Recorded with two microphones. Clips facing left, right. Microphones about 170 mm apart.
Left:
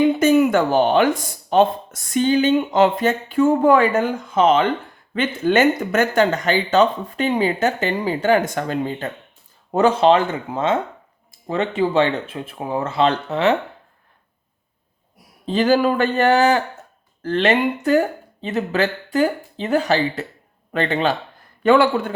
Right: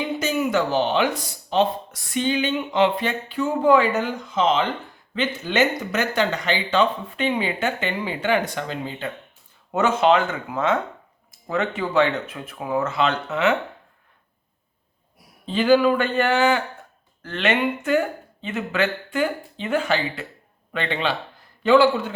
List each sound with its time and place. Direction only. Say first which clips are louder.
0.2 s speech: left 7 dB; 55° left (ahead or behind)
9.7 s speech: left 4 dB; 35° left (ahead or behind)
15.4 s speech: even; 40° left (ahead or behind)
21.6 s speech: left 1 dB; 55° left (ahead or behind)